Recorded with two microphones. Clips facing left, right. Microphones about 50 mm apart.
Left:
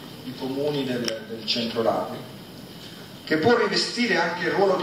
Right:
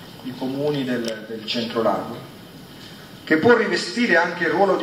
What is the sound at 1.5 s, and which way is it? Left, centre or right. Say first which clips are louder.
Speech: right 3 dB; right.